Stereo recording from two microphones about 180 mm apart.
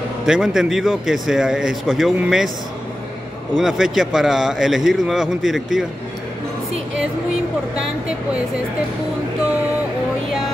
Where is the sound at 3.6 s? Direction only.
Centre (ahead or behind).